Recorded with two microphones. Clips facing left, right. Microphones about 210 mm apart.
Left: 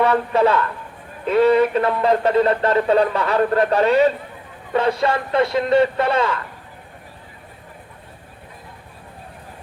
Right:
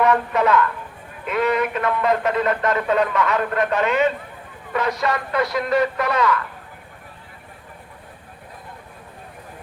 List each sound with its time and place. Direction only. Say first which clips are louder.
0.0 s speech: left 2 dB; 30° left (ahead or behind)